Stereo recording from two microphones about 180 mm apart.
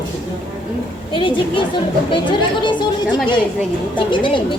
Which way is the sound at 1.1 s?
30° left (ahead or behind).